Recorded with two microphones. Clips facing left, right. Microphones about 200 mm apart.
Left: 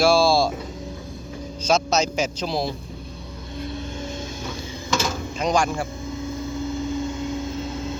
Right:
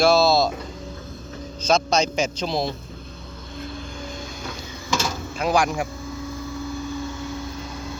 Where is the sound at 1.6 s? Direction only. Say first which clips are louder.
Right 1 dB; 5° left (ahead or behind).